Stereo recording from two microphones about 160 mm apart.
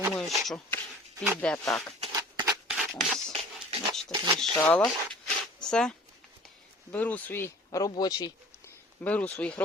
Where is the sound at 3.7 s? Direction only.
40° right (ahead or behind).